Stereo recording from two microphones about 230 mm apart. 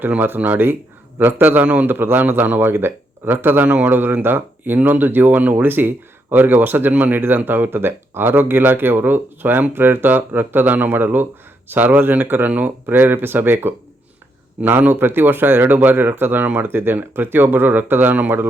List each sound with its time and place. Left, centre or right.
0.0 s speech: centre